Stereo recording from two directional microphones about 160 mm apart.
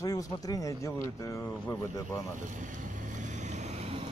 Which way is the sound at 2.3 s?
55° right (ahead or behind).